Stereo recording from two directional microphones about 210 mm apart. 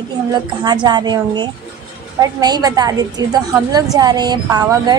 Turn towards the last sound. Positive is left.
turn(degrees=-20)  # may be behind; listen again after turning